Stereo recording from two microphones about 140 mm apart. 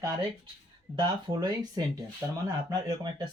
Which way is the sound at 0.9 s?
30° right (ahead or behind).